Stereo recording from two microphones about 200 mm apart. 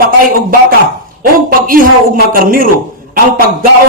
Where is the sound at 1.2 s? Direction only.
45° right (ahead or behind).